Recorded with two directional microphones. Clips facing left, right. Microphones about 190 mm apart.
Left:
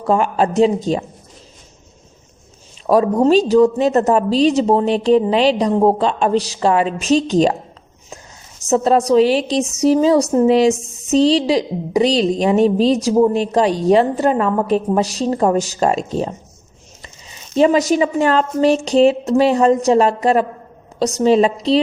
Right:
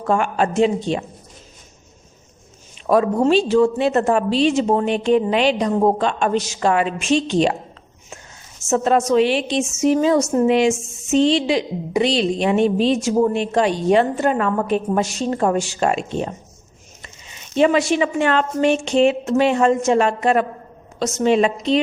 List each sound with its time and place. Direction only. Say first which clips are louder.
0.1 s a woman's voice: left 3 dB; 35° left (ahead or behind)
2.8 s a woman's voice: left 3 dB; 35° left (ahead or behind)
8.7 s a woman's voice: left 3 dB; 35° left (ahead or behind)